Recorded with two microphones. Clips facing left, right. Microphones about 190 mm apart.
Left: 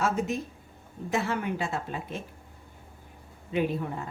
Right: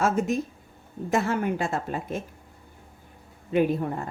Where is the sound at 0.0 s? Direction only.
45° right (ahead or behind).